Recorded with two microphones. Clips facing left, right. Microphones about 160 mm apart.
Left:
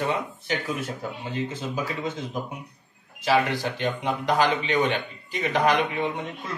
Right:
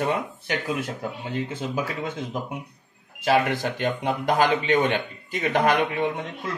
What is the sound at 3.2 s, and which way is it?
A man's voice, 50° right (ahead or behind).